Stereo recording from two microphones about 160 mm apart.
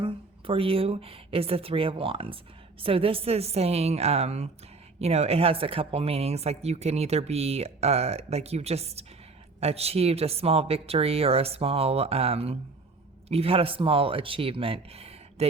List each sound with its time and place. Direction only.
0.0 s a woman's voice: 35° right (ahead or behind)